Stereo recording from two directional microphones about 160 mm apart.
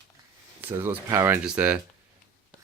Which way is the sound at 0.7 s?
15° right (ahead or behind).